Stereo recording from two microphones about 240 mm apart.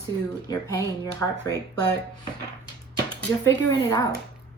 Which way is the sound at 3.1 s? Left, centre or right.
Centre.